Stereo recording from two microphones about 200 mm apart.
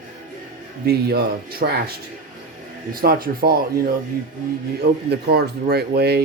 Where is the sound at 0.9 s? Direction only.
55° right (ahead or behind).